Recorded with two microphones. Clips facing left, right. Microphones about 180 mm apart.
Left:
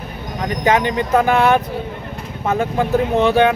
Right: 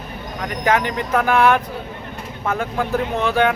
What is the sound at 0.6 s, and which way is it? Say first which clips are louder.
Speech: left 3 dB; 20° left (ahead or behind).